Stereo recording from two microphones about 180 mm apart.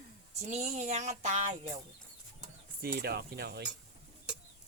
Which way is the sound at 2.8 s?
60° right (ahead or behind).